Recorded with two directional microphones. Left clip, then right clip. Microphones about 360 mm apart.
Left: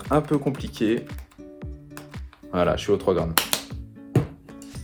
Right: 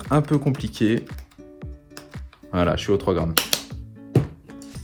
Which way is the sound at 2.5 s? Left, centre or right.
Centre.